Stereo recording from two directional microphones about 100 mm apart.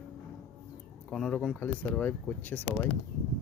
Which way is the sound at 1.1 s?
5° left (ahead or behind).